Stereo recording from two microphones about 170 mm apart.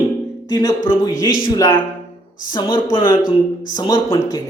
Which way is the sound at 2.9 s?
25° left (ahead or behind).